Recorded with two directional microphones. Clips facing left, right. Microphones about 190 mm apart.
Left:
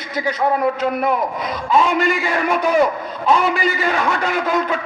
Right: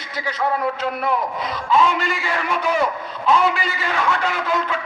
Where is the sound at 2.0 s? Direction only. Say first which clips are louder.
Left 6 dB; 15° left (ahead or behind).